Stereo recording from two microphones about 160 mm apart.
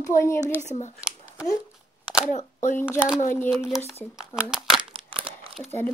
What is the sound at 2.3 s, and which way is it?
Speech, 50° left (ahead or behind).